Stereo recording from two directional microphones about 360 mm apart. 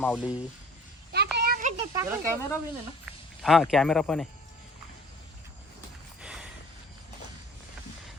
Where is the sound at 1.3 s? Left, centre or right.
Right.